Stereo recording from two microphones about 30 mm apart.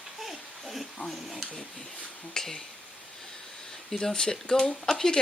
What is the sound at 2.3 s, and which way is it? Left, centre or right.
Speech, centre.